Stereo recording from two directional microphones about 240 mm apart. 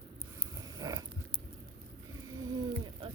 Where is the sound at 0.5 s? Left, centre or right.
Centre.